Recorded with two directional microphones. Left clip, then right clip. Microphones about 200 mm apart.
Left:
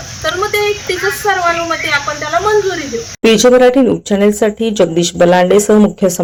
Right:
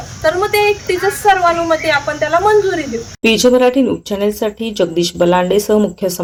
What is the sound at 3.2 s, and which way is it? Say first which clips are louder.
Speech: left 3 dB; 5° left (ahead or behind).